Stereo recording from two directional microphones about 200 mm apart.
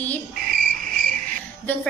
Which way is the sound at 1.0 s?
40° right (ahead or behind).